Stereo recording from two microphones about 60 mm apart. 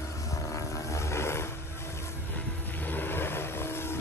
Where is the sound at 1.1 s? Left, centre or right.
Left.